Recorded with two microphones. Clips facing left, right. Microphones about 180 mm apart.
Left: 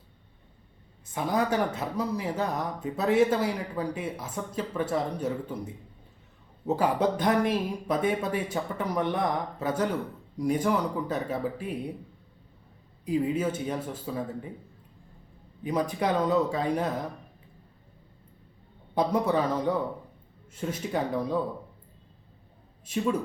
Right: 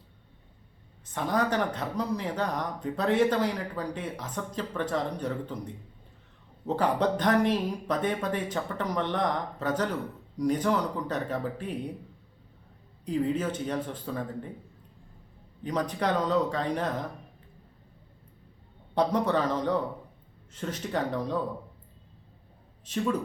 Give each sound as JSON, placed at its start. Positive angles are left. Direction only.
{"t": 1.1, "sound": "speech", "side_deg": 10}
{"t": 13.1, "sound": "speech", "side_deg": 10}
{"t": 15.6, "sound": "speech", "side_deg": 10}
{"t": 18.9, "sound": "speech", "side_deg": 10}
{"t": 22.9, "sound": "speech", "side_deg": 10}